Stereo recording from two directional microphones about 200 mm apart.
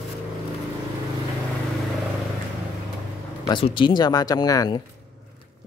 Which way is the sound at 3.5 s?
25° left (ahead or behind).